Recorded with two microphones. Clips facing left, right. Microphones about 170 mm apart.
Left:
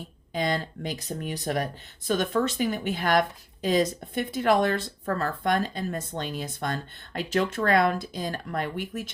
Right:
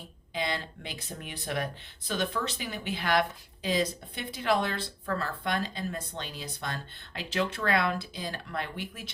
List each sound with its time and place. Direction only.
0.3 s speech: 45° left (ahead or behind)